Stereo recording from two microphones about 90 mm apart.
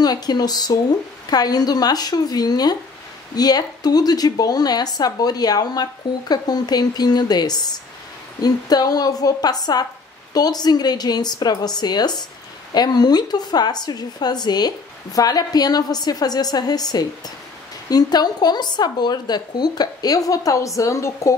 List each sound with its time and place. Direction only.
0.0 s speech: 50° left (ahead or behind)